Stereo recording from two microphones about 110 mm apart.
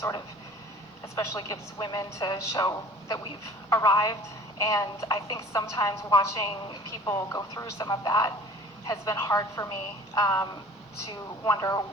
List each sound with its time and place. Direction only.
1.1 s a woman's voice: 30° left (ahead or behind)